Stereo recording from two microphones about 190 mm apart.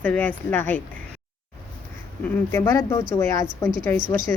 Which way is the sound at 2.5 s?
15° left (ahead or behind).